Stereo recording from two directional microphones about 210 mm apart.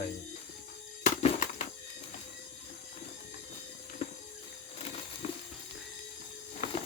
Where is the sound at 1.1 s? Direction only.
35° left (ahead or behind).